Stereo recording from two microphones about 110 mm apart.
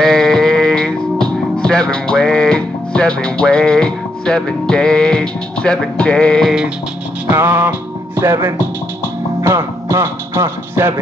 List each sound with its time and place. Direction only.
0.0 s music: 5° left (ahead or behind)
7.2 s music: 15° right (ahead or behind)